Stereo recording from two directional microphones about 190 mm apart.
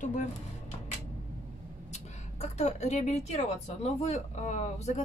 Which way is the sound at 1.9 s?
35° left (ahead or behind).